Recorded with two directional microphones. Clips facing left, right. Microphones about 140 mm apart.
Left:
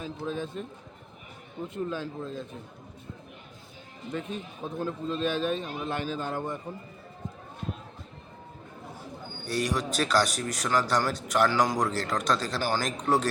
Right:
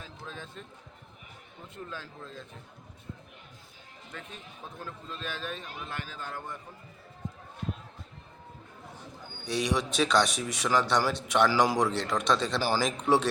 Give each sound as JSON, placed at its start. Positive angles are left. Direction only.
{"t": 0.3, "sound": "a man's voice", "side_deg": 15}
{"t": 1.7, "sound": "a man's voice", "side_deg": 15}
{"t": 4.1, "sound": "a man's voice", "side_deg": 20}
{"t": 9.4, "sound": "a man's voice", "side_deg": 0}